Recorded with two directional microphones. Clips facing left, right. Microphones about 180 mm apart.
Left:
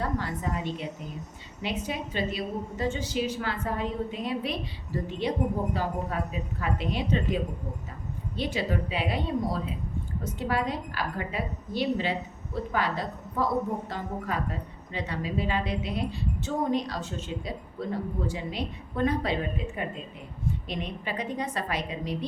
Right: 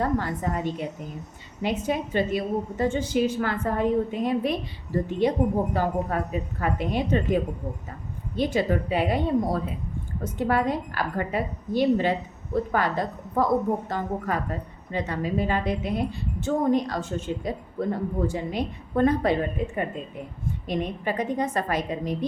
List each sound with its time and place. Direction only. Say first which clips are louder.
0.0 s a woman's voice: right 5 dB; 50° right (ahead or behind)
8.4 s a woman's voice: right 6 dB; 50° right (ahead or behind)